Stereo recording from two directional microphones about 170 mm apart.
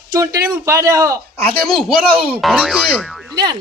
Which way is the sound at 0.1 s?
20° right (ahead or behind).